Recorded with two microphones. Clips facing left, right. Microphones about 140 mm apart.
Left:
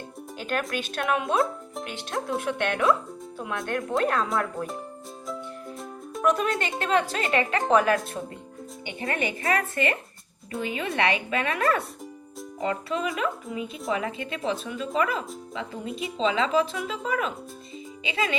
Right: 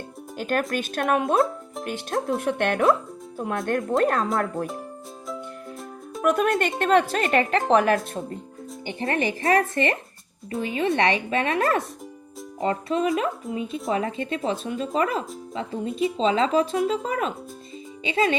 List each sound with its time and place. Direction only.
0.3 s speech: 45° right (ahead or behind)
6.2 s speech: 55° right (ahead or behind)
8.9 s speech: 35° right (ahead or behind)
13.7 s speech: centre (ahead or behind)
13.9 s speech: 35° right (ahead or behind)